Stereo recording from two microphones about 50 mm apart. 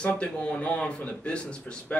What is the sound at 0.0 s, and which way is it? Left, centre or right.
A man's voice, left.